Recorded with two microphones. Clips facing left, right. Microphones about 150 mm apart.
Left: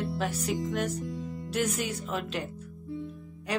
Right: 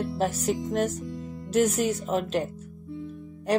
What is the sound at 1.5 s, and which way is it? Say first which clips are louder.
Speech: right 7 dB; 40° right (ahead or behind).